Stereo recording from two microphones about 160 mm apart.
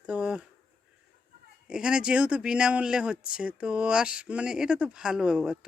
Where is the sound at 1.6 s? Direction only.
5° right (ahead or behind).